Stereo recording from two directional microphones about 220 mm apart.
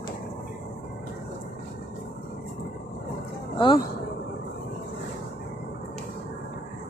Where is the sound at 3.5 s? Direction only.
20° left (ahead or behind).